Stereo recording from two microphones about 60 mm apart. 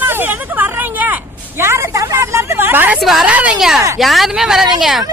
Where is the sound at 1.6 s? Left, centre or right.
Right.